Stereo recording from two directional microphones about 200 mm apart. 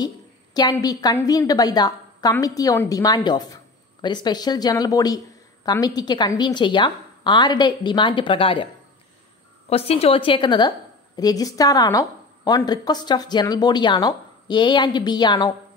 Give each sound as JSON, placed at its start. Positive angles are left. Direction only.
{"t": 0.6, "sound": "a woman's voice", "side_deg": 20}
{"t": 9.7, "sound": "a woman's voice", "side_deg": 30}